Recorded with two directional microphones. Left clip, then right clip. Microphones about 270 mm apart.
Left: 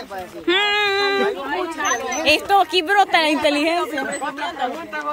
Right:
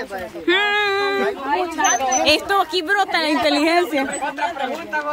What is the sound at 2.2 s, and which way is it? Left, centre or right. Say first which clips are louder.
Speech: left 6 dB; centre.